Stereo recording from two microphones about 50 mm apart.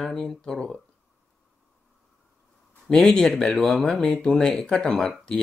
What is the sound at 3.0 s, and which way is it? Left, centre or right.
Speech, centre.